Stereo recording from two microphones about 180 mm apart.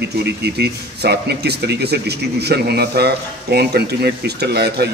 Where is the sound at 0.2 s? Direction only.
65° right (ahead or behind).